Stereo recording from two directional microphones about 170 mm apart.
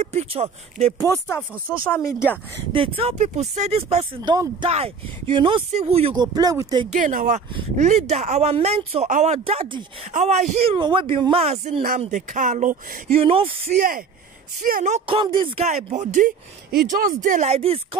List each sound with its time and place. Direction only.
0.0 s speech: 35° right (ahead or behind)
2.0 s speech: 20° left (ahead or behind)
2.7 s speech: 35° right (ahead or behind)
6.1 s speech: 25° right (ahead or behind)
6.9 s speech: 50° right (ahead or behind)
13.2 s speech: 35° right (ahead or behind)
13.7 s speech: 55° right (ahead or behind)
15.0 s speech: 30° right (ahead or behind)